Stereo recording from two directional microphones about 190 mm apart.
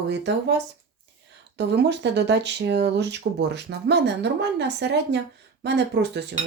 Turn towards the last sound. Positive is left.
turn(degrees=-65)  # may be behind; listen again after turning